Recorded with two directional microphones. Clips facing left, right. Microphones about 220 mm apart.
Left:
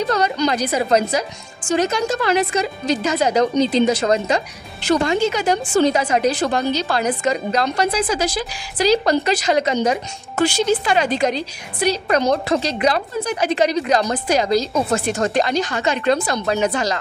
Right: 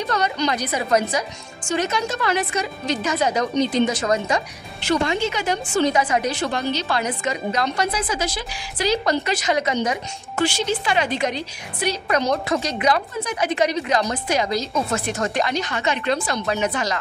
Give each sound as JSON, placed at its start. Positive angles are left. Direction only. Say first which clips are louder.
{"t": 0.0, "sound": "a woman's voice", "louder": "left 4 dB", "side_deg": 30}
{"t": 4.8, "sound": "a woman's voice", "louder": "left 4 dB", "side_deg": 40}